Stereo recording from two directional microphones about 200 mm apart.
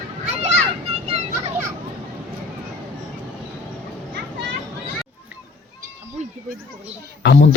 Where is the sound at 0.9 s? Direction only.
30° right (ahead or behind).